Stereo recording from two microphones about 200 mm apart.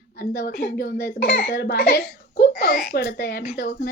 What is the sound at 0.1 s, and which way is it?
A child's voice, 50° left (ahead or behind).